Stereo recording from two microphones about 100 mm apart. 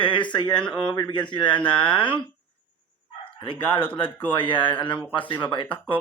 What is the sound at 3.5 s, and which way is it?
Speech, 60° left (ahead or behind).